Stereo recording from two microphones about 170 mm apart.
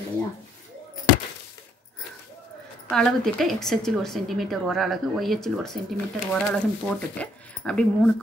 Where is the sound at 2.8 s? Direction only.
Centre (ahead or behind).